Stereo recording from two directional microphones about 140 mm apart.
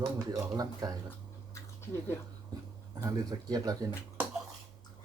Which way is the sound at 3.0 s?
25° right (ahead or behind).